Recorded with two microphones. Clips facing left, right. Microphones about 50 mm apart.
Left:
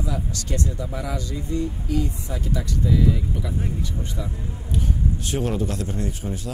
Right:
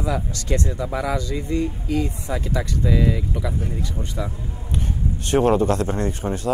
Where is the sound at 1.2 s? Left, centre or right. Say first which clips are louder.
Right 3 dB; right.